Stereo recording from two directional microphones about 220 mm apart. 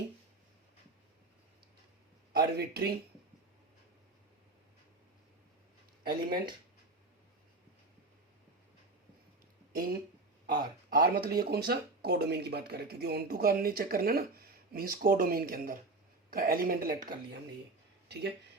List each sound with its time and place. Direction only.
2.3 s speech: 45° right (ahead or behind)
6.0 s speech: 45° right (ahead or behind)
10.8 s speech: 45° right (ahead or behind)
18.1 s speech: 50° right (ahead or behind)